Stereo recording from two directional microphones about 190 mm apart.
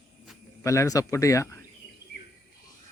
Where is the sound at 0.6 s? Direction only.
15° left (ahead or behind).